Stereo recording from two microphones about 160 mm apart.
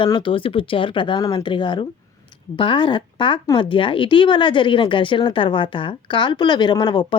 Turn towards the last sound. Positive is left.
turn(degrees=30)  # may be behind; listen again after turning